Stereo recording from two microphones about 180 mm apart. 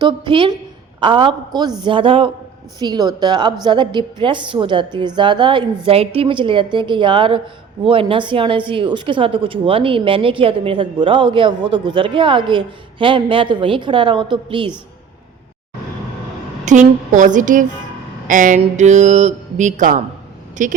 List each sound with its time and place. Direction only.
0.0 s speech: 25° right (ahead or behind)
16.6 s a woman's voice: 45° right (ahead or behind)
18.3 s mantra: 45° right (ahead or behind)
20.6 s a woman's voice: 45° right (ahead or behind)